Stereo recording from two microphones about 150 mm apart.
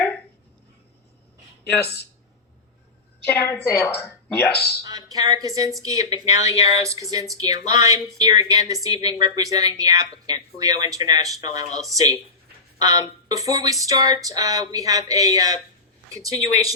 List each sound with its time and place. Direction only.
3.2 s a woman's voice: 10° left (ahead or behind)
4.8 s speech: 25° right (ahead or behind)